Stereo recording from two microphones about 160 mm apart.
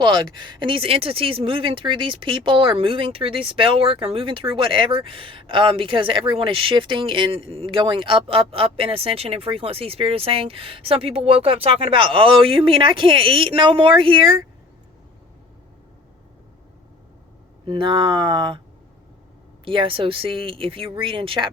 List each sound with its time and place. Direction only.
0.0 s speech: 30° right (ahead or behind)
17.7 s speech: 30° right (ahead or behind)
19.6 s speech: 35° right (ahead or behind)